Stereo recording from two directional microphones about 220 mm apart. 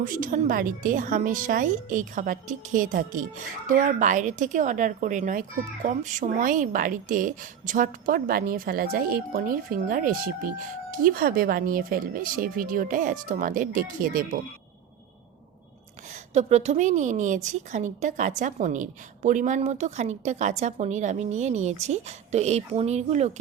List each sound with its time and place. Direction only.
0.0 s a woman's voice: 40° right (ahead or behind)
16.3 s a woman's voice: 30° right (ahead or behind)